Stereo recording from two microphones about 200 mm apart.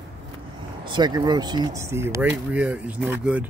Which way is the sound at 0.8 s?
20° right (ahead or behind).